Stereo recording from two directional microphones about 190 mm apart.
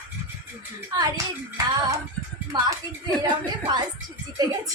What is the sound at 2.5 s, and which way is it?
Speech, 25° right (ahead or behind).